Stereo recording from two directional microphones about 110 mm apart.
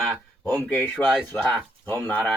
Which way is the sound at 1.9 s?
15° left (ahead or behind).